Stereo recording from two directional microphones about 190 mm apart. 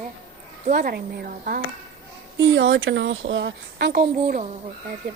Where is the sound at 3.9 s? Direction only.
50° right (ahead or behind).